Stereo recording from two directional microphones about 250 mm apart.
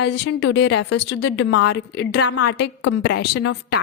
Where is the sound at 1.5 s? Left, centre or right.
Left.